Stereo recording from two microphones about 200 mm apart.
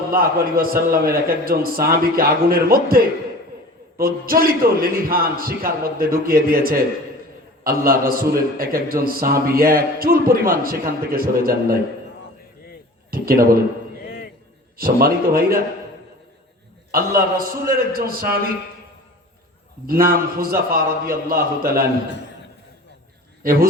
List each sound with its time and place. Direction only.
0.1 s a man's voice: 50° right (ahead or behind)
13.1 s a man's voice: 45° right (ahead or behind)
14.8 s a man's voice: 50° right (ahead or behind)
17.2 s a man's voice: 45° right (ahead or behind)
19.9 s a man's voice: 45° right (ahead or behind)
23.4 s a man's voice: 45° right (ahead or behind)